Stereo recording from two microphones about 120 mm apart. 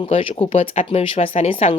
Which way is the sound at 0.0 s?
50° left (ahead or behind).